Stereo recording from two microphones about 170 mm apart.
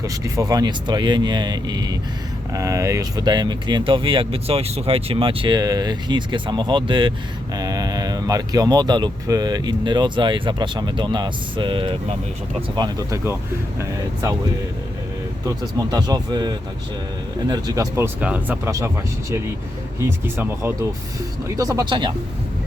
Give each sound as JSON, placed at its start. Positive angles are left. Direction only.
{"t": 0.0, "sound": "speech", "side_deg": -20}
{"t": 15.4, "sound": "speech", "side_deg": -20}
{"t": 20.0, "sound": "speech", "side_deg": -15}